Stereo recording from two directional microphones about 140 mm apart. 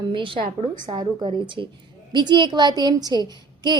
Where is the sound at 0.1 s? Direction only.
40° right (ahead or behind).